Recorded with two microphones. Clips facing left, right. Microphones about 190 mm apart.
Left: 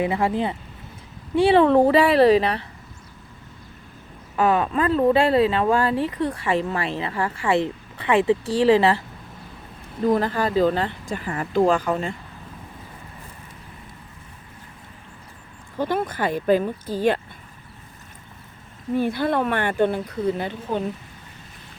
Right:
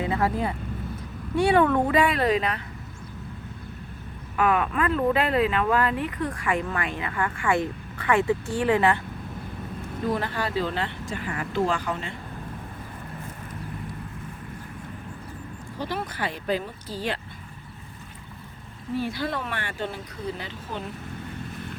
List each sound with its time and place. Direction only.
0.0 s speech: 25° left (ahead or behind)
4.4 s speech: 30° left (ahead or behind)
10.1 s speech: 40° left (ahead or behind)
15.8 s speech: 50° left (ahead or behind)
18.9 s speech: 55° left (ahead or behind)